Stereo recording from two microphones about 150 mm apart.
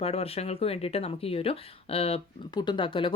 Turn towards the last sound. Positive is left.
turn(degrees=35)  # may be behind; listen again after turning